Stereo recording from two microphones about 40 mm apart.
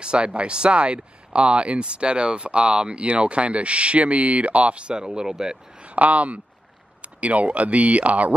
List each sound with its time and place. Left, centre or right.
0.0 s speech: right
5.9 s speech: right